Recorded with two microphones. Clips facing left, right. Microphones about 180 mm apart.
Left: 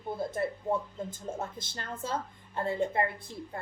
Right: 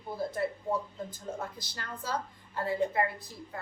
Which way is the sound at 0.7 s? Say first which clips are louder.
Left 2 dB; 25° left (ahead or behind).